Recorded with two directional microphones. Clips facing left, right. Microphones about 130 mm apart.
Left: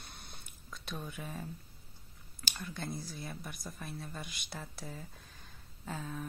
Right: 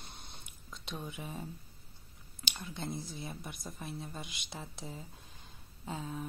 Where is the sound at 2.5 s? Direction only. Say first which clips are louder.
Even; 20° right (ahead or behind).